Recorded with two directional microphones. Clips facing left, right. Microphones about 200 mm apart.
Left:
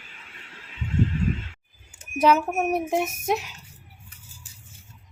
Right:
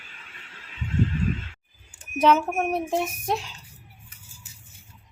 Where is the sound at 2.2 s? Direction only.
5° left (ahead or behind).